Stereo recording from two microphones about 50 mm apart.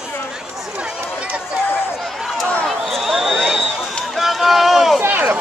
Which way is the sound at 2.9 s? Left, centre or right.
Centre.